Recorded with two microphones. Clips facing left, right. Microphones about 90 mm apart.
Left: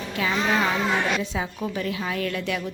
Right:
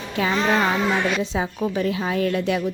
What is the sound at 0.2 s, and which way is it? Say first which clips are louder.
A woman's voice: right 3 dB; 30° right (ahead or behind).